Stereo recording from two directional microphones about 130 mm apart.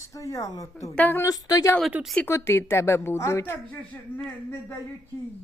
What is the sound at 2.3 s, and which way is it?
Speech, 20° left (ahead or behind).